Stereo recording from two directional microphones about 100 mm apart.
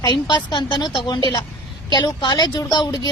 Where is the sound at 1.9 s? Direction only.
50° left (ahead or behind).